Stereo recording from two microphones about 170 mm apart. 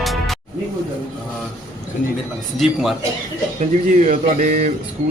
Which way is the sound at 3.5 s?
45° right (ahead or behind).